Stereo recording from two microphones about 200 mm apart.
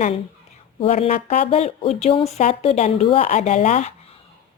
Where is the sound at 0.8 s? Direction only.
30° left (ahead or behind).